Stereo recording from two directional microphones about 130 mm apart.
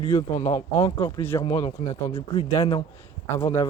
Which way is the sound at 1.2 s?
20° left (ahead or behind).